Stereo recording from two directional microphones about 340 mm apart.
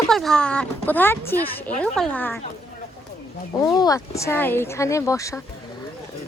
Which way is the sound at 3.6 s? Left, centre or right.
Centre.